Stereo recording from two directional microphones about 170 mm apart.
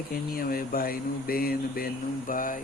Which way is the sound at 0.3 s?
60° left (ahead or behind).